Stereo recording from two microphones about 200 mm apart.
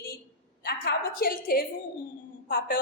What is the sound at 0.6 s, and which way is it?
A woman's voice, 50° left (ahead or behind).